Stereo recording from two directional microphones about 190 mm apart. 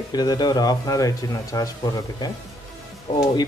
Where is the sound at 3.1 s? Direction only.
25° left (ahead or behind).